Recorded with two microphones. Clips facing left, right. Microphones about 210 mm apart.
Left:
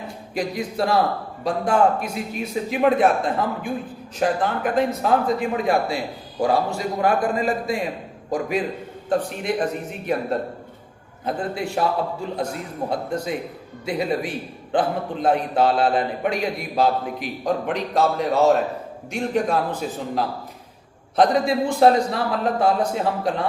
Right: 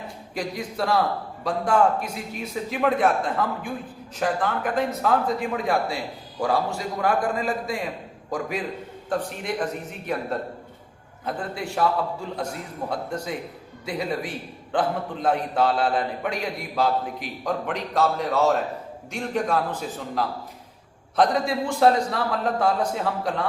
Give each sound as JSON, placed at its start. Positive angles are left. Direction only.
{"t": 0.3, "sound": "a man's voice", "side_deg": 15}
{"t": 12.9, "sound": "a man's voice", "side_deg": 20}
{"t": 21.2, "sound": "a man's voice", "side_deg": 20}